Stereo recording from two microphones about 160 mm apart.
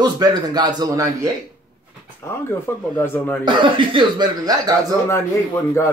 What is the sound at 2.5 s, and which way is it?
Speech, 15° left (ahead or behind).